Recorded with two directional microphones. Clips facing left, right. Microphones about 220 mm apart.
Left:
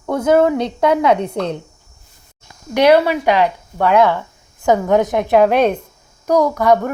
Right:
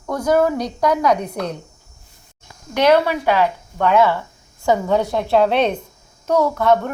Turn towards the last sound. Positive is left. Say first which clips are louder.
# left 2 dB
turn(degrees=10)  # may be behind; listen again after turning